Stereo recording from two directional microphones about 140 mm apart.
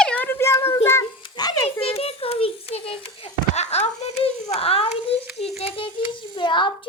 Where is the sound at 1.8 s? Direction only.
45° left (ahead or behind).